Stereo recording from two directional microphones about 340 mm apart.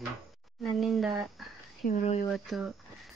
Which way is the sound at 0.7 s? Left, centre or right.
Centre.